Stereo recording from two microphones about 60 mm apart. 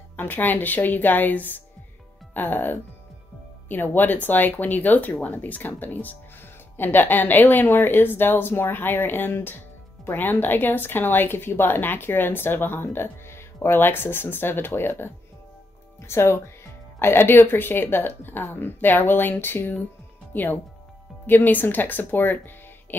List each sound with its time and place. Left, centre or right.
0.1 s speech: left